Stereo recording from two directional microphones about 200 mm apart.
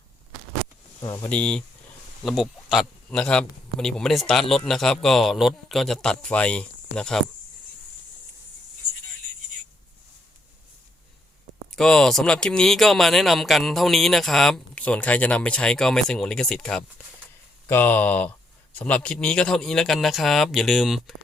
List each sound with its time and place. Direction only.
1.0 s speech: 15° left (ahead or behind)
11.7 s speech: 5° left (ahead or behind)